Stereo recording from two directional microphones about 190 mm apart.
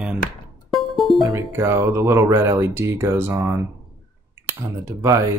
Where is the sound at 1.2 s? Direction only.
20° right (ahead or behind).